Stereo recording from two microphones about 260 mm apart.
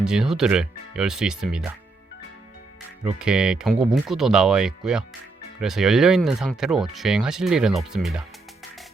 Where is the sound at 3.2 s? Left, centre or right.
Centre.